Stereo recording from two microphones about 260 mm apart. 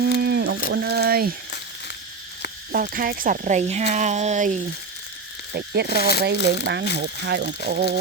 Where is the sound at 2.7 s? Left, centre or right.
Right.